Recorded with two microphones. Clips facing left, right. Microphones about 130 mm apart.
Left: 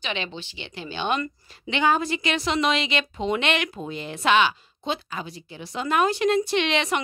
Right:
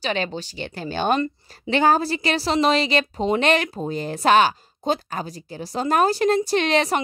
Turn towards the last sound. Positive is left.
turn(degrees=-40)  # may be behind; listen again after turning